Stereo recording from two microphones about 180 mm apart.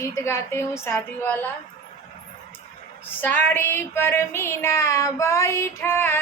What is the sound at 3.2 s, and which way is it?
Child singing, 10° left (ahead or behind).